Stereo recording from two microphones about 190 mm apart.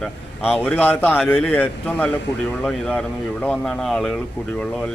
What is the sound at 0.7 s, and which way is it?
Speech, 10° left (ahead or behind).